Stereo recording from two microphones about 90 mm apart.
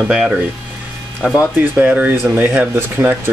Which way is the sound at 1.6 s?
15° right (ahead or behind).